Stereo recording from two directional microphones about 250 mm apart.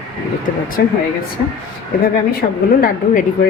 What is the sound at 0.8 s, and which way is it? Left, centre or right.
Speech, left.